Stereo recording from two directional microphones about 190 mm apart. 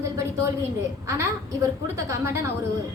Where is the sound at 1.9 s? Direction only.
15° right (ahead or behind).